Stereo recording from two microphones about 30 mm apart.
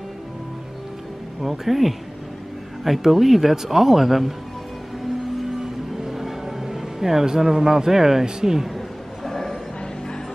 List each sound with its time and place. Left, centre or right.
1.4 s speech: centre
3.0 s speech: centre
5.6 s music: centre
7.2 s speech: right
8.7 s a sound: centre